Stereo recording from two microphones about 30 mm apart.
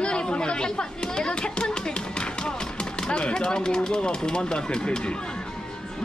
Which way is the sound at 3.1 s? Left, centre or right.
Left.